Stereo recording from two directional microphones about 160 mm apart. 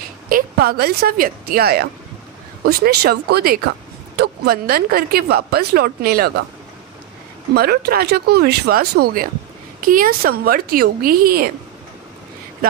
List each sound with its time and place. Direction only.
0.3 s a woman's voice: 70° right (ahead or behind)
7.5 s speech: 80° right